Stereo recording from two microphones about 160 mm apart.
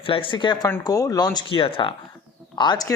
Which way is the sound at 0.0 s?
35° left (ahead or behind).